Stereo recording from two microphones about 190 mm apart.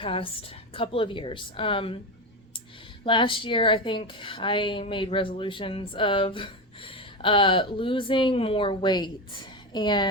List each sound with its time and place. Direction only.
0.0 s a woman's voice: 30° left (ahead or behind)
3.0 s a woman's voice: 25° left (ahead or behind)